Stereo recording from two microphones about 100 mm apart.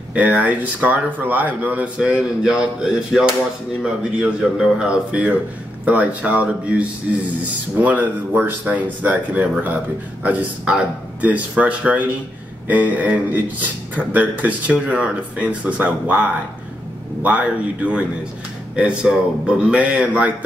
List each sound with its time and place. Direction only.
0.1 s speech: 10° right (ahead or behind)